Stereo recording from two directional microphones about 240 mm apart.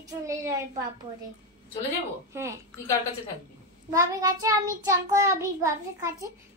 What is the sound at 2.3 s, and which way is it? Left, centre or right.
Child singing, centre.